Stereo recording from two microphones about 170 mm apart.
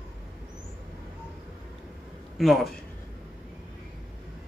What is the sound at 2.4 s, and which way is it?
Speech, centre (ahead or behind).